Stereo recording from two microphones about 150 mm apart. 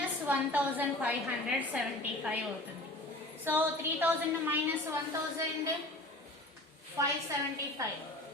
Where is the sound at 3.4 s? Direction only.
15° right (ahead or behind).